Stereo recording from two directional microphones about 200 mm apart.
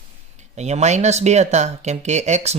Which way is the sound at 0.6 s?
35° right (ahead or behind).